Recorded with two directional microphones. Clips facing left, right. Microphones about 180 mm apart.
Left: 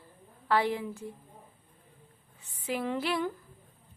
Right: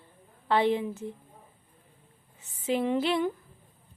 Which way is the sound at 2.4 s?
20° right (ahead or behind).